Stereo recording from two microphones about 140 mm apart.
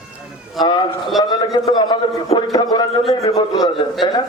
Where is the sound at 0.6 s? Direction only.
30° left (ahead or behind).